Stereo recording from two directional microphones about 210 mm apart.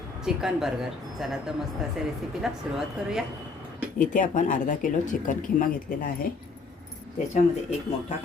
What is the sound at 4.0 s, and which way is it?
Speech, 35° left (ahead or behind).